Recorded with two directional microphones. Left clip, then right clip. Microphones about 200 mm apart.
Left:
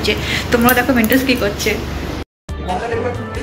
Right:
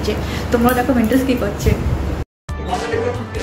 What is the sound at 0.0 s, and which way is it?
Speech, centre (ahead or behind).